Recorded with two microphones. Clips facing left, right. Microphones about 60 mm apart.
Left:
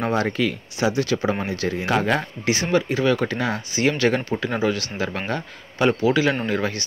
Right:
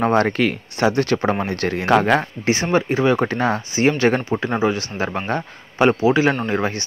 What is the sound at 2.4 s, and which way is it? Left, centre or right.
A man's voice, right.